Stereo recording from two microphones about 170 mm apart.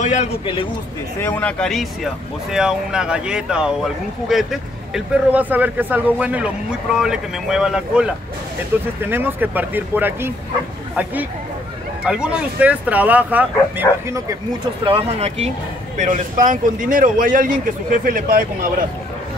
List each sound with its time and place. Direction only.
0.0 s speech: 45° left (ahead or behind)
1.2 s a man's voice: 10° left (ahead or behind); by 10.3 s 10° right (ahead or behind)
12.1 s speech: 5° right (ahead or behind)
14.9 s speech: 35° right (ahead or behind)
16.0 s speech: 50° right (ahead or behind)